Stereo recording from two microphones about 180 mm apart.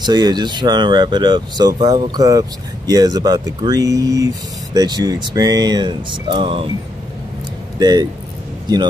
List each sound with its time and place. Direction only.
0.0 s speech: 25° right (ahead or behind)
7.8 s speech: 20° right (ahead or behind)